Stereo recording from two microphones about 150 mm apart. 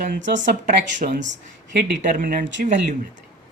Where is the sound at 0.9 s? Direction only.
70° right (ahead or behind).